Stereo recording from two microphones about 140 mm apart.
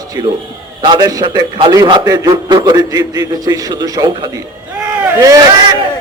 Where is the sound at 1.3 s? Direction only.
40° right (ahead or behind).